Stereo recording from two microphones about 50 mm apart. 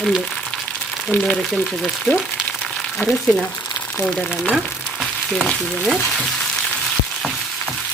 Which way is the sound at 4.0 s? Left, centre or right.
Left.